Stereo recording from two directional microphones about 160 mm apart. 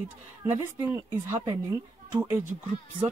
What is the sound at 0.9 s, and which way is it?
Speech, 15° right (ahead or behind).